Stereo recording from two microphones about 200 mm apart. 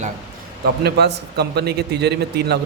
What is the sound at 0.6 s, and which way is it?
A man's voice, 55° right (ahead or behind).